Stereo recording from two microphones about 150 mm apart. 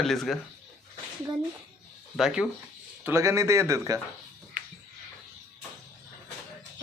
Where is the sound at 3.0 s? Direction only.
15° right (ahead or behind).